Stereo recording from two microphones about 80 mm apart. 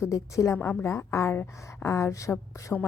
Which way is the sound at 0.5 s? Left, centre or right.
Left.